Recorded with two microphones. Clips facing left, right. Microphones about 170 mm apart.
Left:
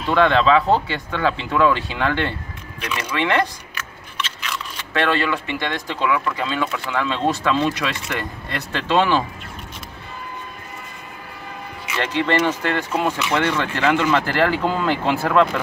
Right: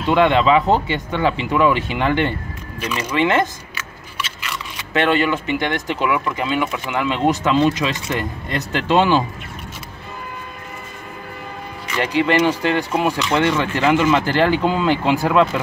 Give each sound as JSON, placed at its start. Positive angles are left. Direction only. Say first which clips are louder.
{"t": 0.1, "sound": "speech", "louder": "right 1 dB", "side_deg": -20}
{"t": 4.2, "sound": "scissors", "louder": "even", "side_deg": -5}
{"t": 4.9, "sound": "speech", "louder": "right 3 dB", "side_deg": -20}
{"t": 12.0, "sound": "speech", "louder": "right 3 dB", "side_deg": -10}